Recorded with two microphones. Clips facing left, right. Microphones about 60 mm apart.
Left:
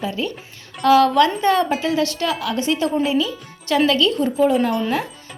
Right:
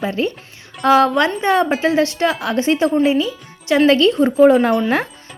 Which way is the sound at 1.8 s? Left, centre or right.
Right.